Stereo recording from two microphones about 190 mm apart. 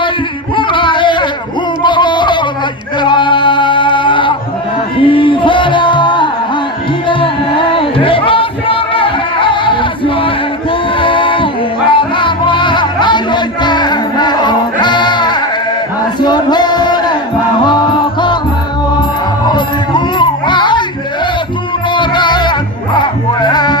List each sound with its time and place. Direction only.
0.5 s a sound: 25° left (ahead or behind)
3.0 s male singing: 25° left (ahead or behind)
5.0 s music: 25° left (ahead or behind)
10.9 s a sound: 25° left (ahead or behind)
11.9 s music: 25° left (ahead or behind)
19.5 s music: 25° left (ahead or behind)
21.9 s music: 25° left (ahead or behind)